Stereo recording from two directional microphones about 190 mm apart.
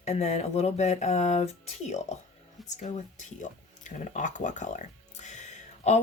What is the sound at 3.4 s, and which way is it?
Speech, 40° left (ahead or behind).